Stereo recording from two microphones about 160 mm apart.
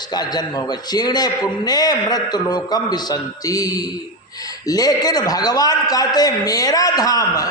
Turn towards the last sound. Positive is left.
turn(degrees=25)  # may be behind; listen again after turning